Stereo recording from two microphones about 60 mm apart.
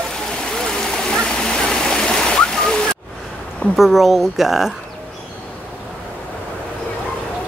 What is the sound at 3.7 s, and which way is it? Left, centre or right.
Speech, centre.